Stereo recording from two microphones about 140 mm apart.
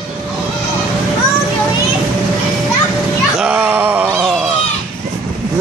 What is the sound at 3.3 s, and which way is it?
Cat, 10° right (ahead or behind).